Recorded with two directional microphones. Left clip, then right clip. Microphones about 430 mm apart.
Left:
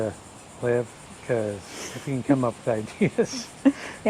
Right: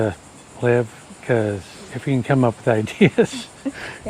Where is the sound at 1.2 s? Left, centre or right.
Right.